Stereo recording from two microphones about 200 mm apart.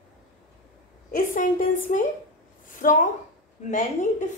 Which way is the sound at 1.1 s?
40° left (ahead or behind).